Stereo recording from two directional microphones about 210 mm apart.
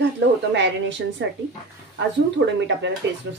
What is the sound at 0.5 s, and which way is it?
A woman's voice, 55° right (ahead or behind).